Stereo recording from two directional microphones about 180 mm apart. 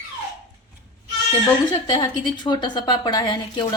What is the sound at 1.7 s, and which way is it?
Speech, 25° left (ahead or behind).